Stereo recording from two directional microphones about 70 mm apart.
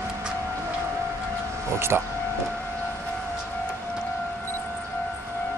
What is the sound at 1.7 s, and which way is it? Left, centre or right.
Speech, right.